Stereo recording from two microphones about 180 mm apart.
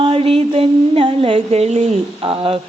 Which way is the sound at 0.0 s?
30° right (ahead or behind).